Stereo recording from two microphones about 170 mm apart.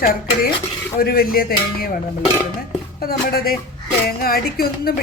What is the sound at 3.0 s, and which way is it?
A woman's voice, 60° left (ahead or behind).